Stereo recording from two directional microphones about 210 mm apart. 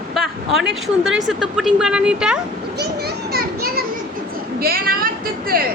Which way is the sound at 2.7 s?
50° right (ahead or behind).